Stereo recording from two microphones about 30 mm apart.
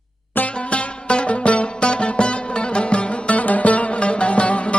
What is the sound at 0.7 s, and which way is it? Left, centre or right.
Music, left.